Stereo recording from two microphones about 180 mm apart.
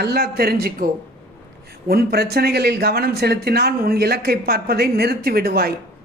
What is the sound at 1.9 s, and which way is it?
A woman's voice, 60° right (ahead or behind).